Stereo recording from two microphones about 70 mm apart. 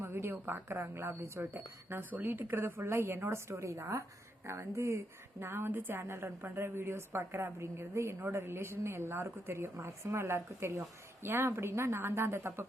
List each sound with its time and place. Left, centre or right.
0.0 s a woman's voice: right